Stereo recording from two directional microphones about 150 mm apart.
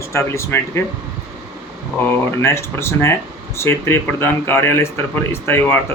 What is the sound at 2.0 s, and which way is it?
Speech, 15° left (ahead or behind).